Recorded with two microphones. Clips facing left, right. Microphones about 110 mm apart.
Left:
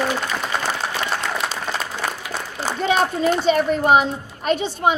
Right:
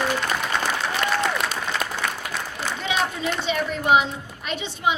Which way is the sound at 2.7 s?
40° left (ahead or behind).